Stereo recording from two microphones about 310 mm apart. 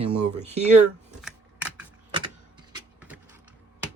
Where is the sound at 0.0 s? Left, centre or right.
Right.